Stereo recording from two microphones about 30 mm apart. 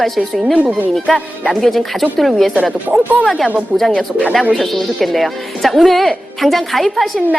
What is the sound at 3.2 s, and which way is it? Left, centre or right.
Speech, centre.